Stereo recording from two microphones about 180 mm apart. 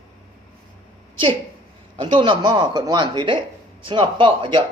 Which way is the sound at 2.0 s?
25° right (ahead or behind).